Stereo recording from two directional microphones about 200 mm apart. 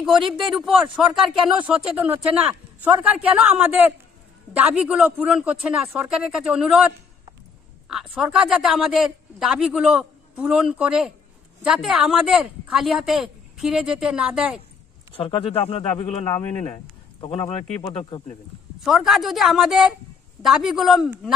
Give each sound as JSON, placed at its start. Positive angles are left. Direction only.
{"t": 0.0, "sound": "a man's voice", "side_deg": 0}
{"t": 7.9, "sound": "a man's voice", "side_deg": -5}
{"t": 15.1, "sound": "speech", "side_deg": 25}
{"t": 18.8, "sound": "a man's voice", "side_deg": 0}